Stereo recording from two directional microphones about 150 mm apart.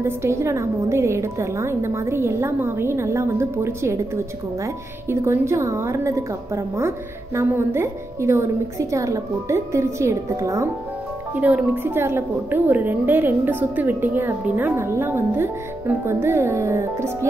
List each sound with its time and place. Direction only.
0.0 s a woman's voice: 20° right (ahead or behind)
11.3 s a woman's voice: 10° right (ahead or behind)